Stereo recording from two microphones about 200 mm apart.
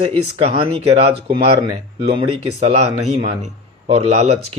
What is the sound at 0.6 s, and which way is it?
A man's voice, 25° right (ahead or behind).